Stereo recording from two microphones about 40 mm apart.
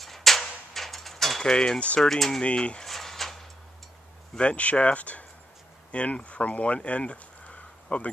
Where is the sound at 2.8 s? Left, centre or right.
Centre.